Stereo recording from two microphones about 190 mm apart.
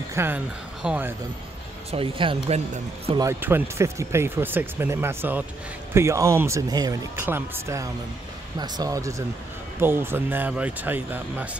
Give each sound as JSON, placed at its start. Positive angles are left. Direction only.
{"t": 0.1, "sound": "speech", "side_deg": -15}
{"t": 1.9, "sound": "speech", "side_deg": -30}
{"t": 3.2, "sound": "speech", "side_deg": -10}